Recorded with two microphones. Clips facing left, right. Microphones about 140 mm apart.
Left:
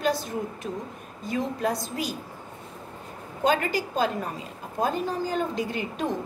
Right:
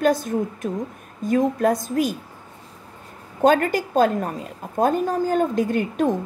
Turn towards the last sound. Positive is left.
turn(degrees=-50)  # may be behind; listen again after turning